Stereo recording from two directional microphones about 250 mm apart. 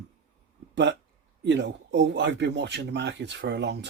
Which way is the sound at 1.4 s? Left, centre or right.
Right.